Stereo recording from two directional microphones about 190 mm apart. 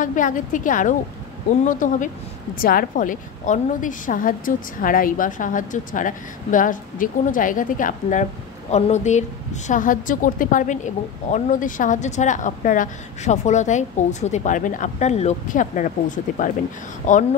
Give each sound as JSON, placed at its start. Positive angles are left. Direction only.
{"t": 0.0, "sound": "a woman's voice", "side_deg": 45}